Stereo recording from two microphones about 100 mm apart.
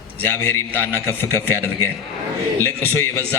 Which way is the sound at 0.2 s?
25° left (ahead or behind).